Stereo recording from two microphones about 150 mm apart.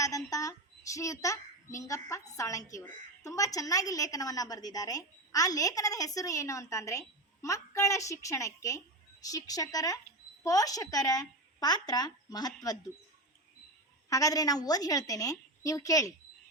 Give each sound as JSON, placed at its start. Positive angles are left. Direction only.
{"t": 0.0, "sound": "a woman's voice", "side_deg": 25}
{"t": 14.1, "sound": "a woman's voice", "side_deg": 25}